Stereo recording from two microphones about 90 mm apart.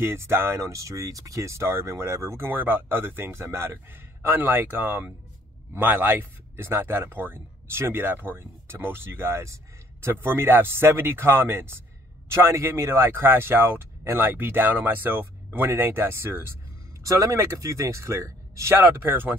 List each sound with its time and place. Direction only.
0.0 s speech: 25° right (ahead or behind)
17.0 s speech: 40° right (ahead or behind)